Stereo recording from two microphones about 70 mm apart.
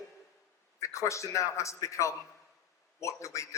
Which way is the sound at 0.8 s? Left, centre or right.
Left.